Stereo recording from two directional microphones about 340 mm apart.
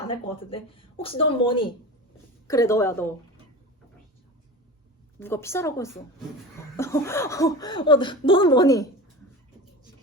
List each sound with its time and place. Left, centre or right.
0.1 s speech: centre
5.2 s speech: centre